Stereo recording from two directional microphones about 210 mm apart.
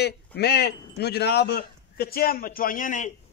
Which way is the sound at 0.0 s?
50° left (ahead or behind).